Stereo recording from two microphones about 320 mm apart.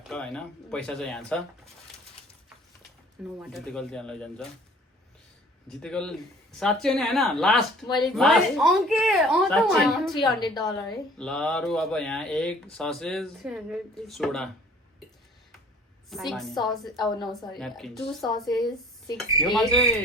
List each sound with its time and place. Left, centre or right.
0.1 s speech: centre
3.3 s speech: centre
5.8 s speech: centre
7.9 s a woman's voice: centre
8.1 s speech: centre
16.0 s a woman's voice: centre
16.6 s a woman's voice: centre
17.6 s speech: centre